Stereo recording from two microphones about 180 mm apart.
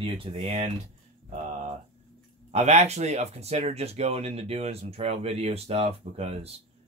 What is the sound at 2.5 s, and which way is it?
Speech, 40° right (ahead or behind).